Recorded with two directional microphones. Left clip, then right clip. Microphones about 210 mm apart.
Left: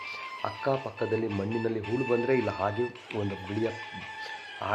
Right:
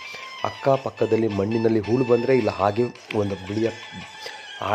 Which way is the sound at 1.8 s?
45° right (ahead or behind).